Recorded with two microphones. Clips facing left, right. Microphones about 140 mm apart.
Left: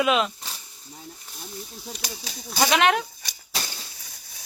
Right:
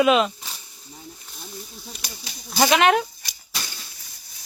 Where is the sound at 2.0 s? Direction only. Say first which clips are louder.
Left 3 dB; 90° left.